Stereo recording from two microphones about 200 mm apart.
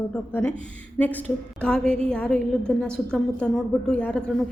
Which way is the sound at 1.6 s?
5° left (ahead or behind).